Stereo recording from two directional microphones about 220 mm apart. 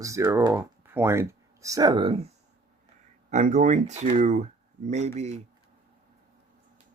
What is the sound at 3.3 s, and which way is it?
Speech, 30° right (ahead or behind).